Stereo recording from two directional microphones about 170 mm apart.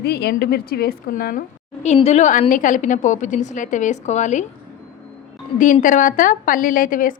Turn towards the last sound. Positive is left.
turn(degrees=50)  # may be behind; listen again after turning